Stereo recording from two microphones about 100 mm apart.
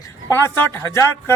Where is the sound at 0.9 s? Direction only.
25° left (ahead or behind).